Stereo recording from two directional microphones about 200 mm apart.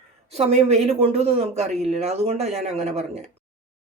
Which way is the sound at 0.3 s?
30° right (ahead or behind).